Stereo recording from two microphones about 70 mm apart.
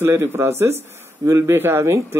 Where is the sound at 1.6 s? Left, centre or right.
Right.